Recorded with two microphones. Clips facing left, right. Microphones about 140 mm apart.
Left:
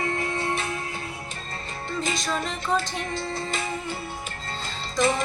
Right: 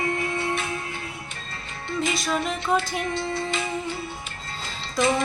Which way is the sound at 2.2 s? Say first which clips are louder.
Right 3 dB; 5° right (ahead or behind).